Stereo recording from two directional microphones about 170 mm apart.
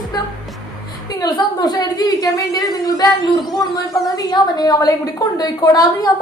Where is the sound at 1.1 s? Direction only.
25° left (ahead or behind).